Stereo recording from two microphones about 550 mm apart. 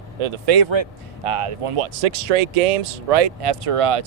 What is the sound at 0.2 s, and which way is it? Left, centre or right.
Speech, right.